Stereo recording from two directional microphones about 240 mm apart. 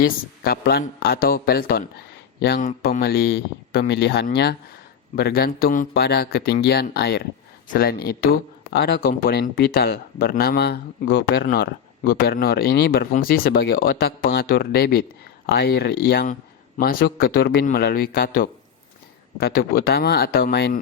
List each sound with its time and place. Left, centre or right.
0.0 s speech: left